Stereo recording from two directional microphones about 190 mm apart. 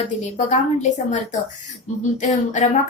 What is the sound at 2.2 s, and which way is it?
Speech, 40° left (ahead or behind).